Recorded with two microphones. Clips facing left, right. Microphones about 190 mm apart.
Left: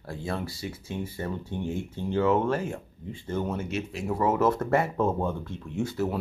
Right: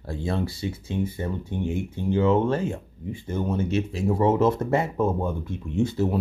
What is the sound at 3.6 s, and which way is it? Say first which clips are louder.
Speech: right 7 dB; 30° right (ahead or behind).